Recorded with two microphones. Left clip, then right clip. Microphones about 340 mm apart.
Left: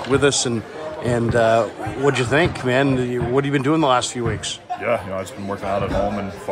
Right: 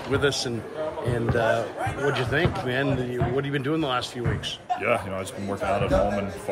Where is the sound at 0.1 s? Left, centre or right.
Centre.